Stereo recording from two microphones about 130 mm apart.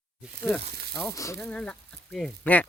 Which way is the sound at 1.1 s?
25° left (ahead or behind).